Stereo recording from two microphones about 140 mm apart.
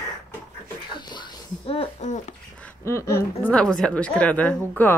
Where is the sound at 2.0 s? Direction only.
60° left (ahead or behind).